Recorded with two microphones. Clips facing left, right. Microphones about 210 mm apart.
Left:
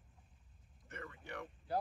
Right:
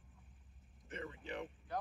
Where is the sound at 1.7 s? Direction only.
30° left (ahead or behind).